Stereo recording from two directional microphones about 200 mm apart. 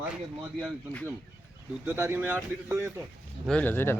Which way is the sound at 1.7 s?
10° right (ahead or behind).